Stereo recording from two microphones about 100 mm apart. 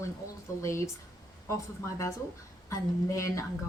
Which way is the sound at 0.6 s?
30° left (ahead or behind).